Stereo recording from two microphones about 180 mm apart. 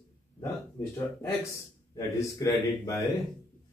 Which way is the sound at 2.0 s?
15° left (ahead or behind).